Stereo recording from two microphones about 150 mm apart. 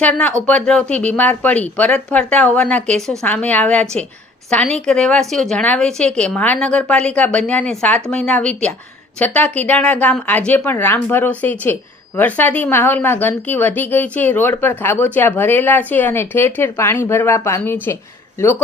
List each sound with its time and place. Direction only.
0.0 s speech: 10° left (ahead or behind)